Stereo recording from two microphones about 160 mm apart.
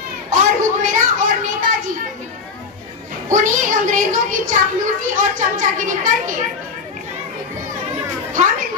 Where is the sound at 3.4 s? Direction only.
50° right (ahead or behind).